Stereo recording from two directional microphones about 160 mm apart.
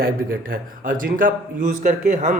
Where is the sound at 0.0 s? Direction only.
65° right (ahead or behind).